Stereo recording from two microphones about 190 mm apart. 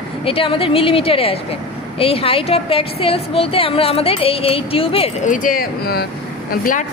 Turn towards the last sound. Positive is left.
turn(degrees=45)  # may be behind; listen again after turning